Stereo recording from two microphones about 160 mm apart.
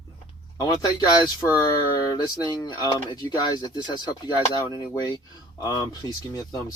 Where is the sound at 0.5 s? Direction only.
25° left (ahead or behind).